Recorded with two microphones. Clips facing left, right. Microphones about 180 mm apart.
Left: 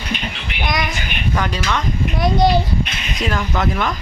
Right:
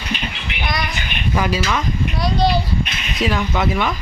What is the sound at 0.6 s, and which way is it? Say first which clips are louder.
Music: left 3 dB; 20° left (ahead or behind).